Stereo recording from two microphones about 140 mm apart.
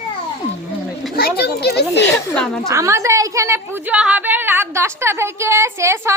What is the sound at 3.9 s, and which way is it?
A woman's voice, 10° right (ahead or behind).